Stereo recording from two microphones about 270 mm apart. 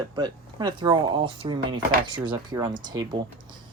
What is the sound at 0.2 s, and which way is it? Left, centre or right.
Speech, centre.